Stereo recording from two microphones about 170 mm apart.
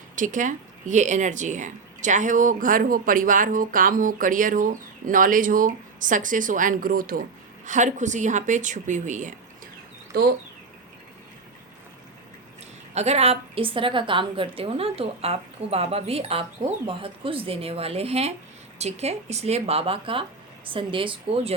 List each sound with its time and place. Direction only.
0.2 s speech: 50° right (ahead or behind)
10.1 s speech: 65° right (ahead or behind)
12.9 s a woman's voice: 40° right (ahead or behind)